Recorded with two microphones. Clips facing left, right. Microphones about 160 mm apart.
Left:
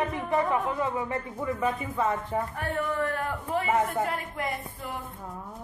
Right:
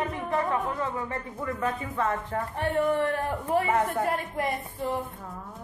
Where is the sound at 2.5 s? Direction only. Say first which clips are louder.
Right 5 dB; 25° right (ahead or behind).